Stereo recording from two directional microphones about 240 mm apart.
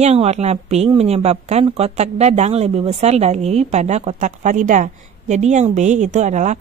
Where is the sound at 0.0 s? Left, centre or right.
Right.